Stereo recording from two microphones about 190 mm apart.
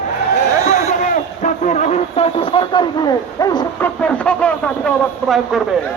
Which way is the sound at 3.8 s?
5° left (ahead or behind).